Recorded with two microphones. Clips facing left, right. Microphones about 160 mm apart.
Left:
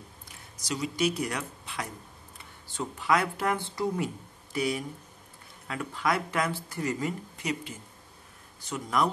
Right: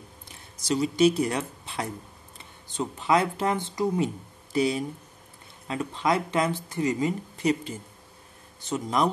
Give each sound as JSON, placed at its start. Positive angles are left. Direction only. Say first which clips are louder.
{"t": 0.6, "sound": "speech", "louder": "right 7 dB", "side_deg": -30}